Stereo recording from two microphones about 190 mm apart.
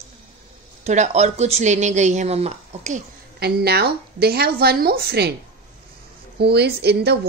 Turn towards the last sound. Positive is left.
turn(degrees=-60)  # may be behind; listen again after turning